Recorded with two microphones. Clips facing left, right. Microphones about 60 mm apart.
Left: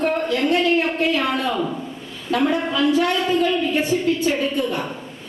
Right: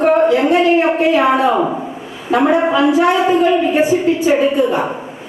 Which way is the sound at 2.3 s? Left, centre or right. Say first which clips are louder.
Right 7 dB; right.